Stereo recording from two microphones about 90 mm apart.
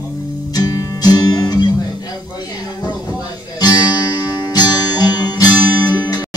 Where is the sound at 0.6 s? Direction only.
45° left (ahead or behind).